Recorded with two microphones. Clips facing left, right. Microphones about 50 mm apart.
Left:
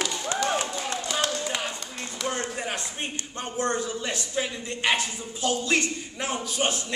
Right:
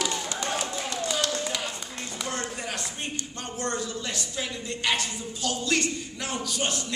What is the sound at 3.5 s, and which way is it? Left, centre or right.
A woman's voice, left.